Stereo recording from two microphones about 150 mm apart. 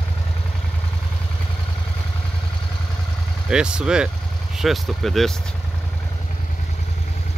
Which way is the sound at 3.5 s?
5° right (ahead or behind).